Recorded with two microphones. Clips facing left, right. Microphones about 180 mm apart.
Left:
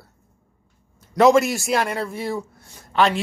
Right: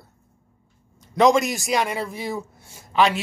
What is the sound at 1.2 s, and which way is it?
Speech, 5° left (ahead or behind).